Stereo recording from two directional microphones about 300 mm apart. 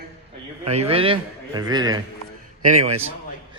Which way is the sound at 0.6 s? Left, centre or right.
Centre.